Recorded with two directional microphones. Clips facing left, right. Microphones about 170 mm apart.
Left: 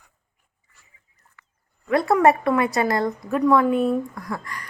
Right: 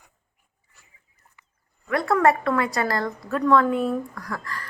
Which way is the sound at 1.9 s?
25° left (ahead or behind).